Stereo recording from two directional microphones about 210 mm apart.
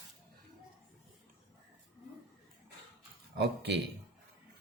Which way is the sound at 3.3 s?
50° right (ahead or behind).